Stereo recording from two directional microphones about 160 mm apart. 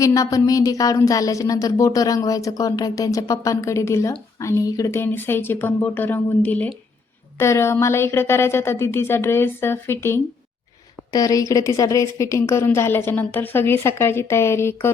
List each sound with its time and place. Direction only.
0.0 s a woman's voice: 20° left (ahead or behind)